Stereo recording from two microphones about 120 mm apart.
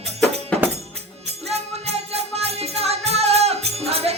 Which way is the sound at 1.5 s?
60° right (ahead or behind).